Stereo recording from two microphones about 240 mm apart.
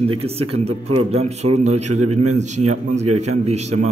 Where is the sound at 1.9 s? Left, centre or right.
Right.